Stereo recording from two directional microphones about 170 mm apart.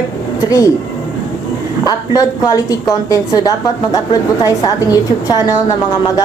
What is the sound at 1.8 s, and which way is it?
A woman's voice, 20° left (ahead or behind).